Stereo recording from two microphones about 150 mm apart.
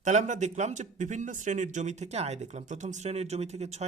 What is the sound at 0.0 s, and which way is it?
A man's voice, 50° right (ahead or behind).